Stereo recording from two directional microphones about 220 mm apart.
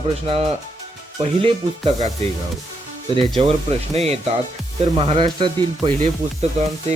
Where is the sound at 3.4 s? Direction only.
25° right (ahead or behind).